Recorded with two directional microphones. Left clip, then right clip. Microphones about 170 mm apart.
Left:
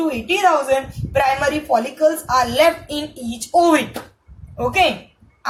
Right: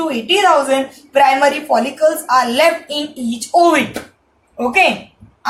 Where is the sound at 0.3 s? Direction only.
30° left (ahead or behind).